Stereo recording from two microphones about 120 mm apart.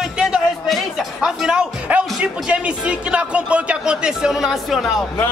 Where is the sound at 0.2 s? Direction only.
5° right (ahead or behind).